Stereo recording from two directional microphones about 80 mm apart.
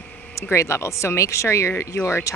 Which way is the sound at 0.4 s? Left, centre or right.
Left.